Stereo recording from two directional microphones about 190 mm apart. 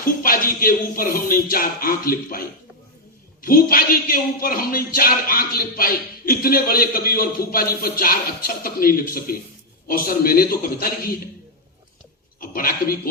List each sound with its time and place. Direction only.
0.0 s speech: 50° left (ahead or behind)
12.4 s speech: 50° left (ahead or behind)